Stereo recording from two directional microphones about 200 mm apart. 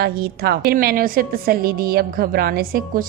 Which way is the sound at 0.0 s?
50° right (ahead or behind).